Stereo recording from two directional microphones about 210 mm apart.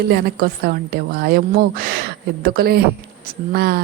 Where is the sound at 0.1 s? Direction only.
50° right (ahead or behind).